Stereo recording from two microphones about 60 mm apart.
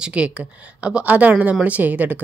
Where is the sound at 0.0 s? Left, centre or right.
Right.